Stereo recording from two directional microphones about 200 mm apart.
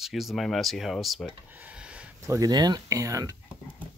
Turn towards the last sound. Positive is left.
turn(degrees=-15)  # may be behind; listen again after turning